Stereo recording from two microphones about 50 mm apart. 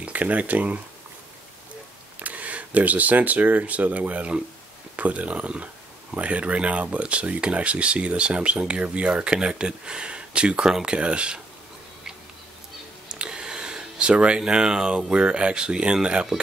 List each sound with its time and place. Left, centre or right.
0.0 s speech: right
2.1 s speech: right
13.1 s speech: centre